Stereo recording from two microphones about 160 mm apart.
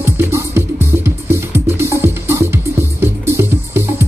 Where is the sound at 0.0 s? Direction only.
15° right (ahead or behind).